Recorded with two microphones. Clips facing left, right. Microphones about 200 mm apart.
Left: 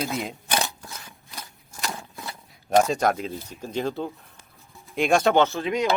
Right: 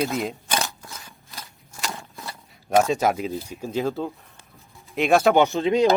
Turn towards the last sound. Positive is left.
turn(degrees=-30)  # may be behind; listen again after turning